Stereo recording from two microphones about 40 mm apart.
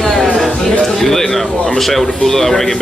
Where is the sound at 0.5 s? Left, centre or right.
Left.